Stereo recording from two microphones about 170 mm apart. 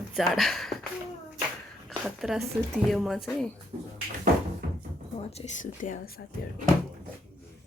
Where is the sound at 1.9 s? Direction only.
Centre (ahead or behind).